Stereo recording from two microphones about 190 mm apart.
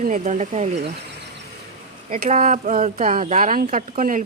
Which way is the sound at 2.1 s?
45° right (ahead or behind).